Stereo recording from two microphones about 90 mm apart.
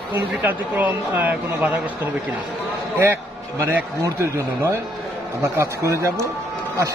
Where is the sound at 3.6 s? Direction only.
35° right (ahead or behind).